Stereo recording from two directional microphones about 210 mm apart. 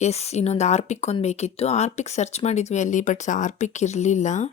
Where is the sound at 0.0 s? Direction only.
30° left (ahead or behind).